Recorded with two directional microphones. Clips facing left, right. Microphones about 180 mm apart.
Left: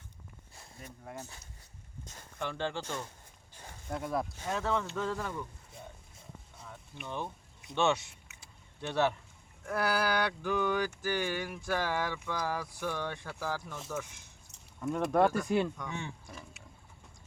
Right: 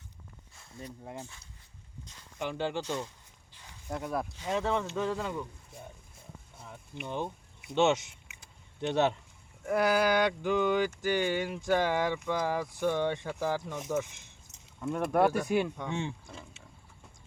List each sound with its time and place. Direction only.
2.4 s speech: 15° right (ahead or behind)
3.5 s a sound: 45° left (ahead or behind)
3.8 s speech: 5° right (ahead or behind)
4.4 s speech: 20° right (ahead or behind)
6.7 s a sound: 20° right (ahead or behind)
7.8 s speech: 20° right (ahead or behind)
14.8 s speech: centre (ahead or behind)
15.8 s speech: 25° right (ahead or behind)